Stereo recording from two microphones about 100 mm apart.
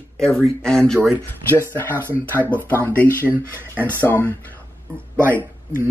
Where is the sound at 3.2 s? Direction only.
20° right (ahead or behind).